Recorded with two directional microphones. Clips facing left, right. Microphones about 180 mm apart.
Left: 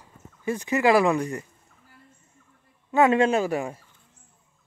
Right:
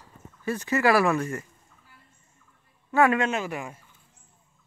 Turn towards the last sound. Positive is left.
turn(degrees=35)  # may be behind; listen again after turning